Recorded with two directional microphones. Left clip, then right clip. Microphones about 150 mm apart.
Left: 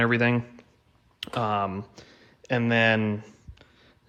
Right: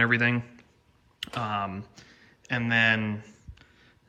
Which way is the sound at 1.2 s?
45° left (ahead or behind).